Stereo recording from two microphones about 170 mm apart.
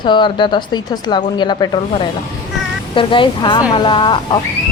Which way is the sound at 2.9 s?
30° left (ahead or behind).